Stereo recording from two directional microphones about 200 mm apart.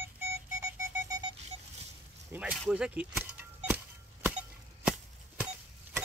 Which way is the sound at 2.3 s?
5° right (ahead or behind).